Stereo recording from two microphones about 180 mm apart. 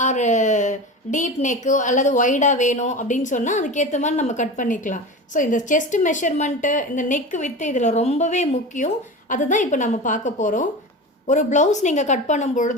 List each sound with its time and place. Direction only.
0.0 s a woman's voice: 40° left (ahead or behind)